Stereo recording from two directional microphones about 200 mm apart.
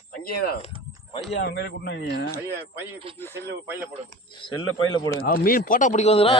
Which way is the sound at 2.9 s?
25° right (ahead or behind).